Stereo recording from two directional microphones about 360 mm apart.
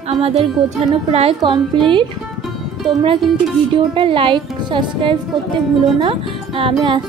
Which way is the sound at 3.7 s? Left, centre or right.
Centre.